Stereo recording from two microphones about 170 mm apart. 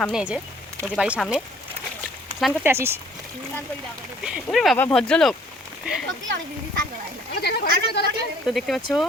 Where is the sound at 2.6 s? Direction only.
15° right (ahead or behind).